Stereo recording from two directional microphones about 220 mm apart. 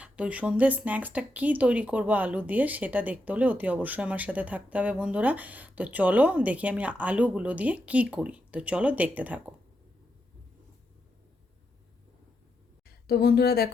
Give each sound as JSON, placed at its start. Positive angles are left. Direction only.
{"t": 0.0, "sound": "speech", "side_deg": -5}
{"t": 13.1, "sound": "speech", "side_deg": 45}